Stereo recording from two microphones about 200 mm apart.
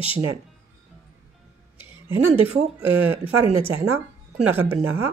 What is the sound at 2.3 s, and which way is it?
Speech, 30° right (ahead or behind).